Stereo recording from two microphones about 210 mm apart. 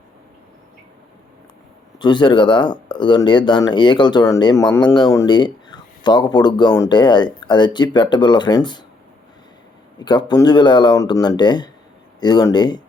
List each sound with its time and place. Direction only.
2.0 s speech: 20° left (ahead or behind)
10.0 s speech: 20° left (ahead or behind)